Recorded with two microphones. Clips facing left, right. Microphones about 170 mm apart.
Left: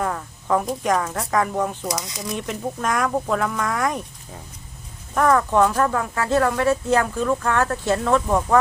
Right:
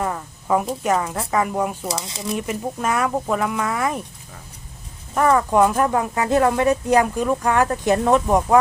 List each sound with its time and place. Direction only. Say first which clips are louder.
0.0 s a woman's voice: even; 5° right (ahead or behind)
1.9 s speech: even; 30° right (ahead or behind)
2.2 s speech: right 4 dB; 5° right (ahead or behind)
5.1 s speech: right 1 dB; 10° right (ahead or behind)